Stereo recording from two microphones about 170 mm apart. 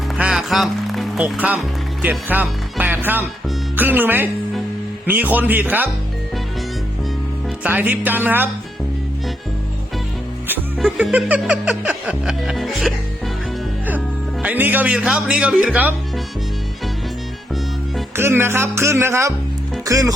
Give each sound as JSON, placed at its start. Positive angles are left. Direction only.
{"t": 0.2, "sound": "speech", "side_deg": -5}
{"t": 7.6, "sound": "speech", "side_deg": -10}
{"t": 10.8, "sound": "music", "side_deg": 0}
{"t": 14.4, "sound": "speech", "side_deg": -10}
{"t": 18.2, "sound": "speech", "side_deg": -15}